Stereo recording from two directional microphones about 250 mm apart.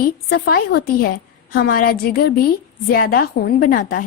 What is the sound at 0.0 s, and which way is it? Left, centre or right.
A woman's voice, left.